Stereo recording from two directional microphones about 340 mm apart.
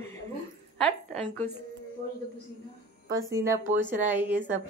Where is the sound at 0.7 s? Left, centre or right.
Centre.